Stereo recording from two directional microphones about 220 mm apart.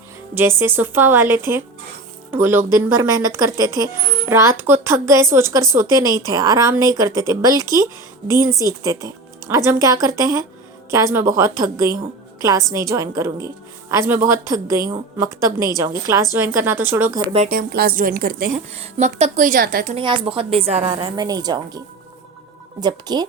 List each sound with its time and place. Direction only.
0.3 s a woman's voice: 10° right (ahead or behind)
17.3 s a woman's voice: 35° right (ahead or behind); by 23.2 s 20° right (ahead or behind)